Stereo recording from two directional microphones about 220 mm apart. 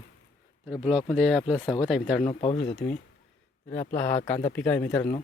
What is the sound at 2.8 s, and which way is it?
Speech, 50° left (ahead or behind).